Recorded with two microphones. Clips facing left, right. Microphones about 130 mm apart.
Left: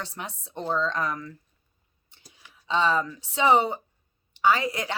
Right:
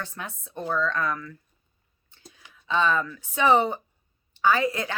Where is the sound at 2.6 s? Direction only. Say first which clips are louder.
Even; 20° left (ahead or behind).